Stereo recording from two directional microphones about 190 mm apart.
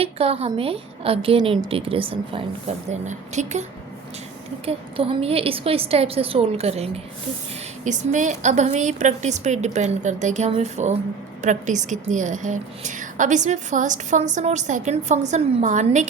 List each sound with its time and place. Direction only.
0.0 s a woman's voice: 30° right (ahead or behind)